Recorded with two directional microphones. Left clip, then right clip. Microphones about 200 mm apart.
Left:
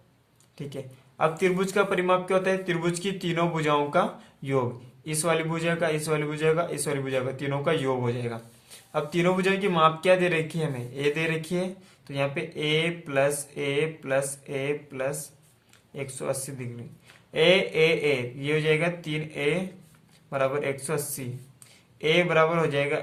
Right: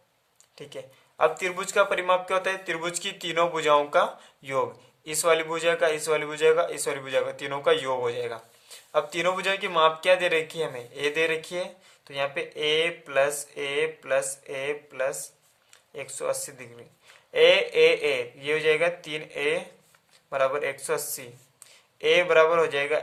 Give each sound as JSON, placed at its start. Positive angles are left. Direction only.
{"t": 0.5, "sound": "a man's voice", "side_deg": -20}